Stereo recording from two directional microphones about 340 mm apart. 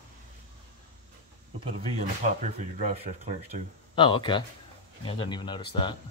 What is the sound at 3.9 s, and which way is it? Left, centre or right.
Speech, centre.